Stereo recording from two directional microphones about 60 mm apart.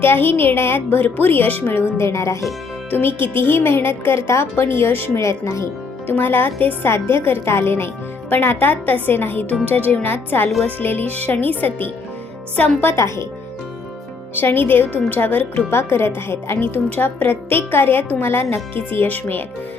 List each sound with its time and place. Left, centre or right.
0.0 s a woman's voice: left
1.8 s speech: left
2.9 s a woman's voice: left
5.2 s speech: left
6.1 s a woman's voice: left
13.0 s speech: left
14.3 s a woman's voice: left
15.7 s a woman's voice: left
16.6 s a woman's voice: left